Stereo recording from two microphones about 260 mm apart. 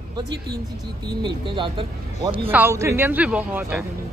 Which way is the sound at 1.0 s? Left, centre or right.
Centre.